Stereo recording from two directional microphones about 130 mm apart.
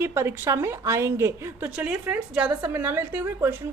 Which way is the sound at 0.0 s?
15° right (ahead or behind).